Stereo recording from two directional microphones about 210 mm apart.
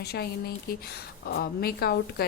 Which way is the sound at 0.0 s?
50° left (ahead or behind).